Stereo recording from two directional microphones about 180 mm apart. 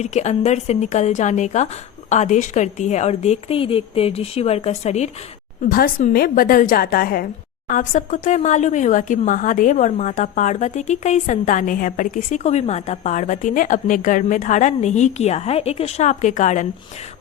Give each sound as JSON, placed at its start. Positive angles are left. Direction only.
{"t": 0.0, "sound": "speech", "side_deg": 40}
{"t": 5.6, "sound": "speech", "side_deg": 55}